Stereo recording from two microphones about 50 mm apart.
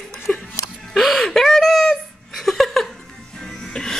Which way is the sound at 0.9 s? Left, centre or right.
Centre.